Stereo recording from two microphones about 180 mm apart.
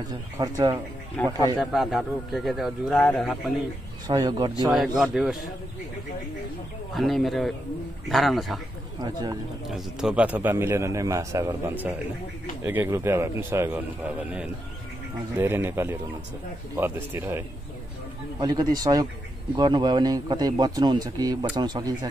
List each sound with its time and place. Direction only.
0.4 s a man's voice: 20° right (ahead or behind)
1.6 s speech: centre (ahead or behind)
4.1 s a man's voice: 25° right (ahead or behind)
4.6 s speech: centre (ahead or behind)
6.9 s speech: centre (ahead or behind)
9.0 s a man's voice: 20° right (ahead or behind)
9.7 s a man's voice: 5° right (ahead or behind); by 21.9 s 25° right (ahead or behind)